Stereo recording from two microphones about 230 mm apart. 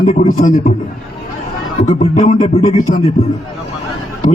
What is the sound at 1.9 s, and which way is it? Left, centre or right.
A man's voice, left.